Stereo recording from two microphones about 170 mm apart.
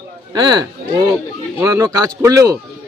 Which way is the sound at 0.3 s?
25° right (ahead or behind).